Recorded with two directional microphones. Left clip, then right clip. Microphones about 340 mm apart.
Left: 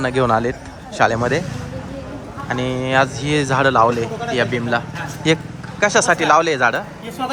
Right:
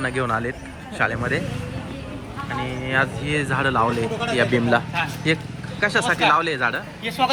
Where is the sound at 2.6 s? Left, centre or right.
Centre.